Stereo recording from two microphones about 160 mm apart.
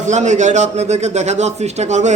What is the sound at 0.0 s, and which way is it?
Speech, 45° right (ahead or behind).